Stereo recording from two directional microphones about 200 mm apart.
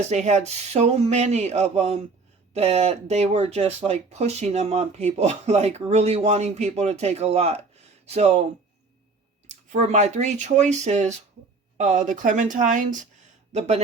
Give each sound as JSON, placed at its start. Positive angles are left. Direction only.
{"t": 0.1, "sound": "speech", "side_deg": -35}
{"t": 9.7, "sound": "speech", "side_deg": -35}